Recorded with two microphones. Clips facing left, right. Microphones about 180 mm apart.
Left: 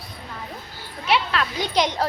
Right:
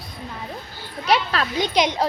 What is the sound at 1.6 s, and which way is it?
Speech, 15° right (ahead or behind).